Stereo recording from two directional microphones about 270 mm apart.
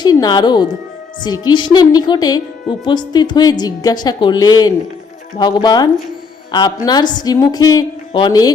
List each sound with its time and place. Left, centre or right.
0.0 s a woman's voice: centre